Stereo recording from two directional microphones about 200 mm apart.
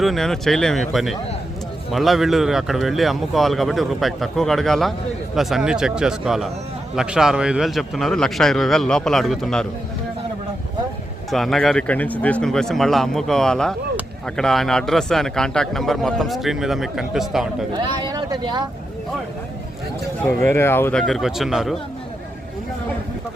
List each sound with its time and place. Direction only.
0.0 s speech: centre (ahead or behind)
11.3 s speech: centre (ahead or behind)
17.7 s speech: 20° right (ahead or behind)
20.2 s speech: 10° left (ahead or behind)